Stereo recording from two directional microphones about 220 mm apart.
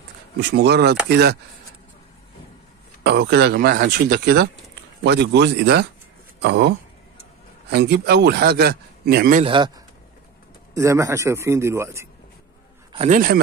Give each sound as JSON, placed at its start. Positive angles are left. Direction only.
{"t": 0.4, "sound": "speech", "side_deg": -50}
{"t": 3.0, "sound": "speech", "side_deg": -50}
{"t": 7.7, "sound": "speech", "side_deg": -50}
{"t": 9.4, "sound": "speech", "side_deg": -20}
{"t": 10.7, "sound": "a man's voice", "side_deg": -15}
{"t": 12.9, "sound": "a man's voice", "side_deg": -30}